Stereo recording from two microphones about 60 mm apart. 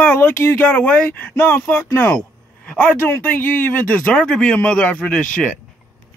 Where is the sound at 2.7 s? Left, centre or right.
Left.